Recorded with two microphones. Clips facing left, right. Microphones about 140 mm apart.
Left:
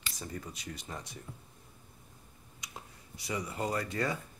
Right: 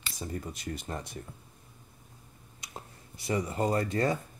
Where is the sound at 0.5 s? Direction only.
50° right (ahead or behind).